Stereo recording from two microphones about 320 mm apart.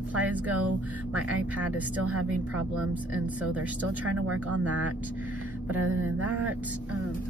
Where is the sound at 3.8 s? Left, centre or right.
Right.